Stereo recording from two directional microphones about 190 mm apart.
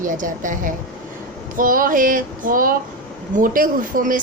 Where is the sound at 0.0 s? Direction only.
45° right (ahead or behind).